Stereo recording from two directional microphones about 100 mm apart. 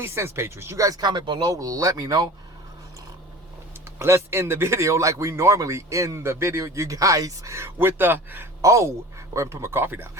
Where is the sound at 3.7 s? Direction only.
25° right (ahead or behind).